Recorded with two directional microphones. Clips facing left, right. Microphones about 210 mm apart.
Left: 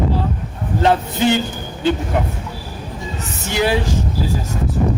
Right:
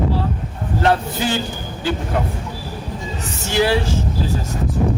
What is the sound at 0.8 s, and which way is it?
Speech, 20° left (ahead or behind).